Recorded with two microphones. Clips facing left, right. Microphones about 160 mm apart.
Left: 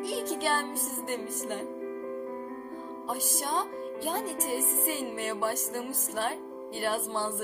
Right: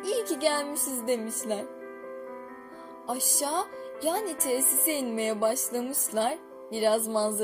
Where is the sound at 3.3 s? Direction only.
10° right (ahead or behind).